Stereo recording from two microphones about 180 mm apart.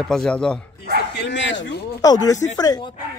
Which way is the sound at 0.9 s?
70° left (ahead or behind).